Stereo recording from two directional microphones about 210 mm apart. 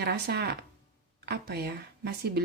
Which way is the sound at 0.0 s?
50° right (ahead or behind).